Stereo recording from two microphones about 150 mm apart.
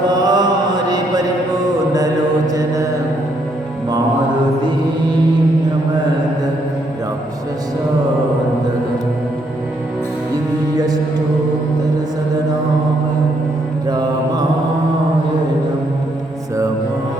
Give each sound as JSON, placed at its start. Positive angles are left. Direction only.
{"t": 0.1, "sound": "mantra", "side_deg": -25}
{"t": 0.9, "sound": "a sound", "side_deg": -25}
{"t": 2.5, "sound": "mantra", "side_deg": -25}
{"t": 13.8, "sound": "mantra", "side_deg": -30}